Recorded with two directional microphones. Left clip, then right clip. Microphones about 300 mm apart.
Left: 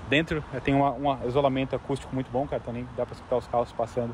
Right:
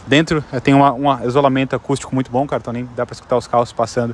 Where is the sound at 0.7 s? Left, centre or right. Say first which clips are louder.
Right 12 dB; right.